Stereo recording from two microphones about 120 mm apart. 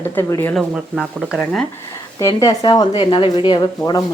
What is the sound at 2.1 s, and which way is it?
Speech, 30° left (ahead or behind).